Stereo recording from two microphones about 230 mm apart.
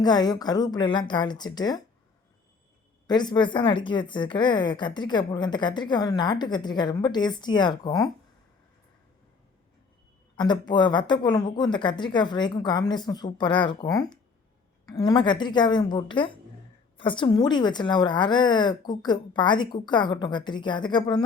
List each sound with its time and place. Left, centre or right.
0.0 s speech: centre
3.1 s a woman's voice: centre
10.3 s a woman's voice: centre